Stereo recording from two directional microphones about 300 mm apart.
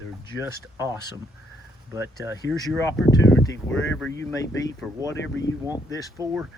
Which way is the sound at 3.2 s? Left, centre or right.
Left.